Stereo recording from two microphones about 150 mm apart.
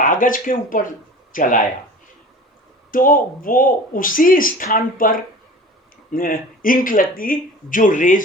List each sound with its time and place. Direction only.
0.0 s speech: 65° left (ahead or behind)
2.9 s speech: 65° left (ahead or behind)